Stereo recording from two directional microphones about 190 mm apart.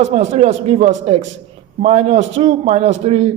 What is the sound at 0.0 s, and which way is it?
A man's voice, 35° right (ahead or behind).